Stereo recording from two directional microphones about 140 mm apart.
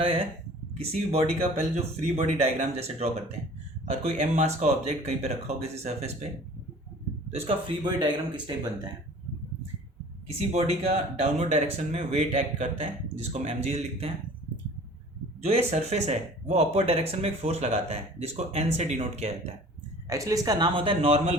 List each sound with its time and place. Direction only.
0.7 s speech: 45° right (ahead or behind)
7.9 s speech: 30° right (ahead or behind)
10.2 s speech: 50° right (ahead or behind)
15.4 s speech: 50° right (ahead or behind)
20.1 s a woman's voice: 25° right (ahead or behind)
20.7 s speech: 40° right (ahead or behind)